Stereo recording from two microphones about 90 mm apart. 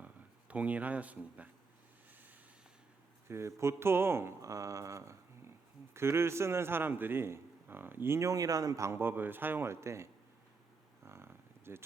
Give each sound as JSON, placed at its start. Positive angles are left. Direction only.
{"t": 0.0, "sound": "speech", "side_deg": -15}
{"t": 3.2, "sound": "a man's voice", "side_deg": -30}
{"t": 11.0, "sound": "a sound", "side_deg": -30}